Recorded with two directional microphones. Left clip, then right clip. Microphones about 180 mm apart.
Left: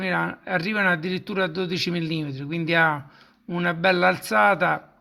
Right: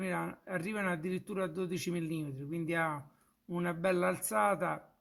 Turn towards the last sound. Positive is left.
turn(degrees=15)  # may be behind; listen again after turning